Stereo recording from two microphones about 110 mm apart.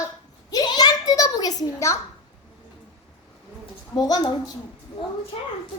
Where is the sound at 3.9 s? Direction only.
35° left (ahead or behind).